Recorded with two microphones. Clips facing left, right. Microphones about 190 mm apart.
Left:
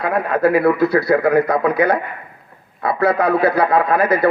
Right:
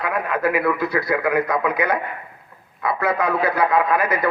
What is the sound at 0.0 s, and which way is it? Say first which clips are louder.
A man's voice: left 5 dB; 35° left (ahead or behind).